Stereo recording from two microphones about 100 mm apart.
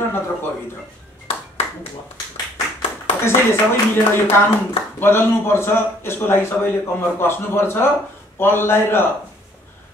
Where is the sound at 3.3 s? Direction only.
20° left (ahead or behind).